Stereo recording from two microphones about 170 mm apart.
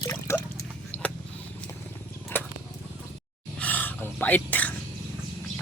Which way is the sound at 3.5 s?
10° left (ahead or behind).